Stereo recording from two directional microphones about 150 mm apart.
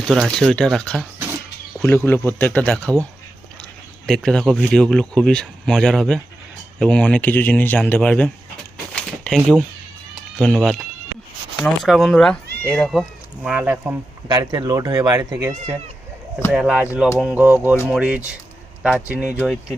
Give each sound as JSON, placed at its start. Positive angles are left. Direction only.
{"t": 0.1, "sound": "speech", "side_deg": 0}
{"t": 2.0, "sound": "speech", "side_deg": 15}
{"t": 4.0, "sound": "speech", "side_deg": 5}
{"t": 9.0, "sound": "a sound", "side_deg": 5}
{"t": 10.2, "sound": "speech", "side_deg": 0}
{"t": 12.9, "sound": "speech", "side_deg": 0}
{"t": 14.3, "sound": "speech", "side_deg": -25}
{"t": 16.5, "sound": "speech", "side_deg": -5}